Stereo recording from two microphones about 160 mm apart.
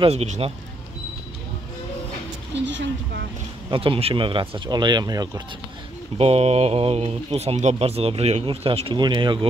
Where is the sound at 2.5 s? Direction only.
90° right.